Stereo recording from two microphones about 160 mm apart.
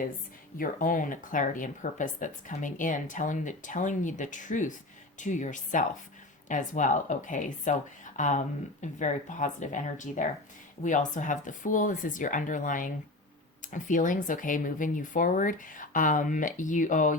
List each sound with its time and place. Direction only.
0.6 s speech: 55° left (ahead or behind)